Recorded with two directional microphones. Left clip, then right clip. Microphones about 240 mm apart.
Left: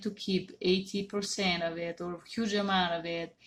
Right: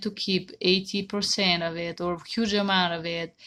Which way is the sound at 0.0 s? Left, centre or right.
Right.